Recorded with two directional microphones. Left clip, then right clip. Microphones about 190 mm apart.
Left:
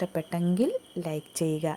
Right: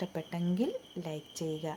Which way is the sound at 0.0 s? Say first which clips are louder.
Left 7 dB; 20° left (ahead or behind).